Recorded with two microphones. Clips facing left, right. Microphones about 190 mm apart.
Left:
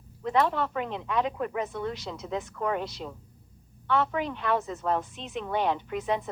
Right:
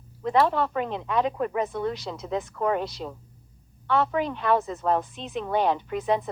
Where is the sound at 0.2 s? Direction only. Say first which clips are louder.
Right 3 dB; 35° right (ahead or behind).